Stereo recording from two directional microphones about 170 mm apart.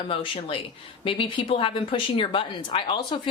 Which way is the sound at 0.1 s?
30° left (ahead or behind).